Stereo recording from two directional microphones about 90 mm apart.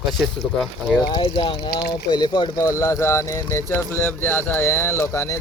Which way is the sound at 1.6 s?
50° left (ahead or behind).